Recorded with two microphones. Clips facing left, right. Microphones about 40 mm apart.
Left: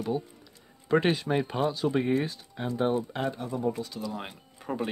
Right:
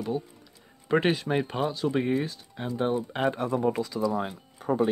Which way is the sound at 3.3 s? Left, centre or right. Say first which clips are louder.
Right 5 dB; right.